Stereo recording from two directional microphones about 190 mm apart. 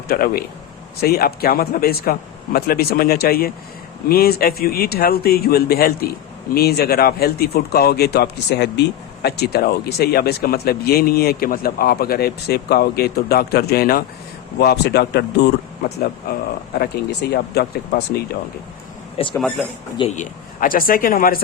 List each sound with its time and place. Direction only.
0.1 s speech: 55° left (ahead or behind)
19.2 s speech: 30° left (ahead or behind)
20.1 s speech: 45° left (ahead or behind)